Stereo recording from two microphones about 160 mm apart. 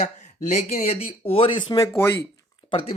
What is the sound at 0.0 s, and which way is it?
Speech, 45° left (ahead or behind).